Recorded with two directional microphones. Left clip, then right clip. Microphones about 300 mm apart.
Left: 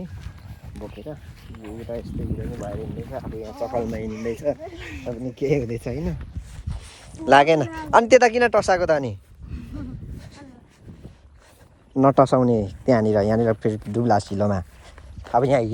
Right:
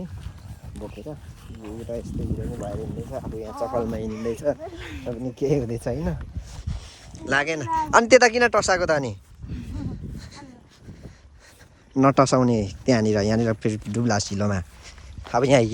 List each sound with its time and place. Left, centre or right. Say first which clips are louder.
0.8 s speech: left 1 dB; centre
4.8 s speech: left 1 dB; right
5.0 s speech: left 1 dB; centre
6.7 s a sound: left 1 dB; centre
7.3 s speech: left 8 dB; centre
9.7 s a sound: left 1 dB; centre
11.9 s speech: left 2 dB; centre